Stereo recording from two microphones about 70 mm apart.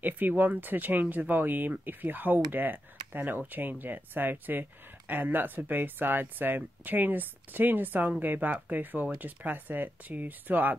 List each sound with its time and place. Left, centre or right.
0.0 s speech: right